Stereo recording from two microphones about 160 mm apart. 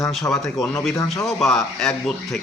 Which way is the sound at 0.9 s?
20° left (ahead or behind).